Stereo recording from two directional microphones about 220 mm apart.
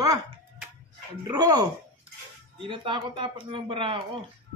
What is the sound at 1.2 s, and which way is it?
Speech, 20° right (ahead or behind).